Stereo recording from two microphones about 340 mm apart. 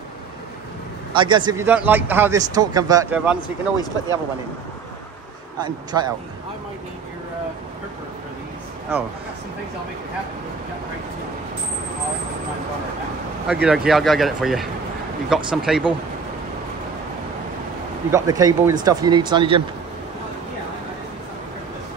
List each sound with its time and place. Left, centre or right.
1.1 s a man's voice: centre
5.6 s a man's voice: centre
13.5 s speech: centre
18.1 s a man's voice: centre